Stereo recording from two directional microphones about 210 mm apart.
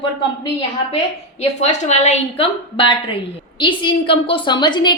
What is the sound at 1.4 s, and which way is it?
A woman's voice, 30° left (ahead or behind).